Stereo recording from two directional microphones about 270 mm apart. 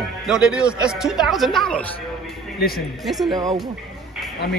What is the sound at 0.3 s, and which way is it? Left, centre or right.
A man's voice, centre.